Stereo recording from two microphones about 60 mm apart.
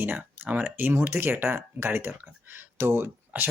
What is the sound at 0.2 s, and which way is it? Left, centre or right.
Speech, right.